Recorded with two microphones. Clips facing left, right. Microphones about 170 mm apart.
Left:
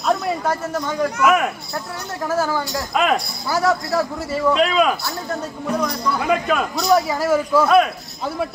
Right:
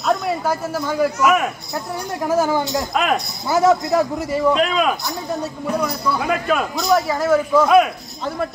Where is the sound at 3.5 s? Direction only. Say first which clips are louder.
Right 4 dB; 20° right (ahead or behind).